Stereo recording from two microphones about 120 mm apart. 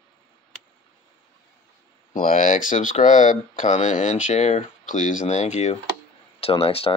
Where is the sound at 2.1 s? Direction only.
90° left.